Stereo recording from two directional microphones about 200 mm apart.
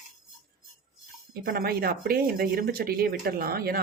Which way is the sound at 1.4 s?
50° right (ahead or behind).